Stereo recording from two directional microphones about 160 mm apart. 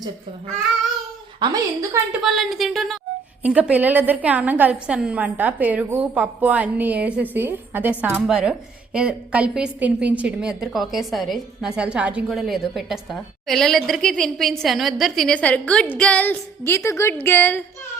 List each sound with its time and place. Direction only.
1.4 s a woman's voice: 20° right (ahead or behind)
2.2 s a woman's voice: centre (ahead or behind)